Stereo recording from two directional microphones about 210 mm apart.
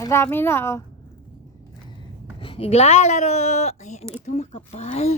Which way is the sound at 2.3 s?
25° left (ahead or behind).